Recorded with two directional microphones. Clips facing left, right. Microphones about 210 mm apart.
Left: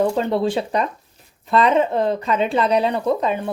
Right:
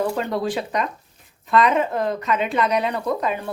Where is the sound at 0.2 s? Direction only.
25° left (ahead or behind).